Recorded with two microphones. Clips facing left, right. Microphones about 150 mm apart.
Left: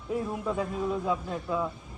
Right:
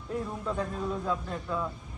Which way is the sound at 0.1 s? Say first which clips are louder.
Left 3 dB; 5° left (ahead or behind).